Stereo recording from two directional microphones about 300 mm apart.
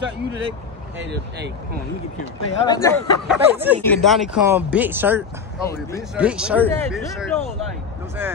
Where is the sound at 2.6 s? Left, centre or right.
Centre.